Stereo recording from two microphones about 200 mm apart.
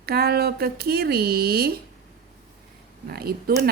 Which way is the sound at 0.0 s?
50° right (ahead or behind).